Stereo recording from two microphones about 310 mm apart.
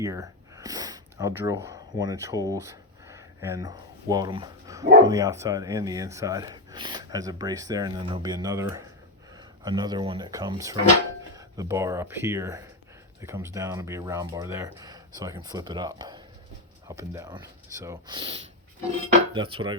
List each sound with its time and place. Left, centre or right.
0.0 s speech: centre